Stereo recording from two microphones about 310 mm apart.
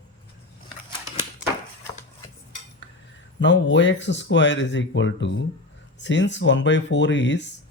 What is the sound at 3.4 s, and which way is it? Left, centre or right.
Speech, left.